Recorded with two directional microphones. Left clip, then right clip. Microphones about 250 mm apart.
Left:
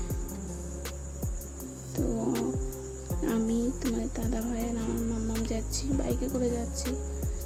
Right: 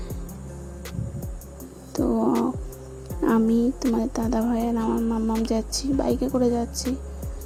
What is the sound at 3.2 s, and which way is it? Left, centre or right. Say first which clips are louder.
Speech: right 9 dB; centre.